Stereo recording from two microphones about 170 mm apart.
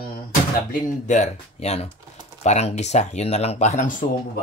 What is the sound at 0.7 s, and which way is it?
Speech, 45° left (ahead or behind).